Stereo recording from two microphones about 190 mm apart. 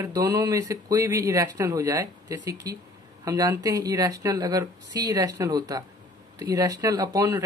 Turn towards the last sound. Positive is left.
turn(degrees=-20)  # may be behind; listen again after turning